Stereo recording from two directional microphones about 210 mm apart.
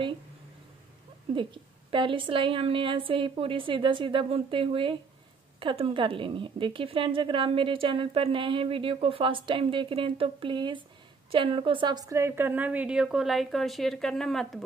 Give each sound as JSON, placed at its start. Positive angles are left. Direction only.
{"t": 1.3, "sound": "a woman's voice", "side_deg": -25}